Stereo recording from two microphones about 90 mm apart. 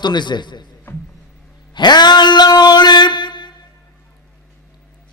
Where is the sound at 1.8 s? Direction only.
55° left (ahead or behind).